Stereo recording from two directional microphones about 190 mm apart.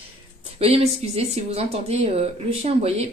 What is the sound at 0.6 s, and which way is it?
Speech, 30° right (ahead or behind).